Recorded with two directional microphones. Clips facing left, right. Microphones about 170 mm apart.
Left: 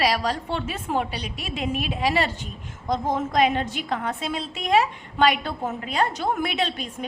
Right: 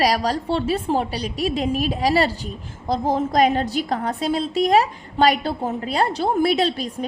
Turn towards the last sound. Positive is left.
turn(degrees=-35)  # may be behind; listen again after turning